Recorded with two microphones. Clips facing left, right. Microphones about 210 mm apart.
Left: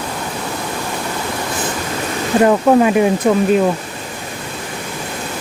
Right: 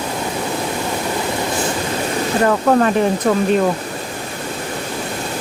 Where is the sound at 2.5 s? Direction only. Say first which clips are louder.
Left 2 dB; 10° left (ahead or behind).